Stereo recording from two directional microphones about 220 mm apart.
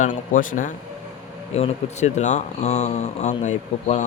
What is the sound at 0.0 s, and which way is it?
Speech, 35° left (ahead or behind).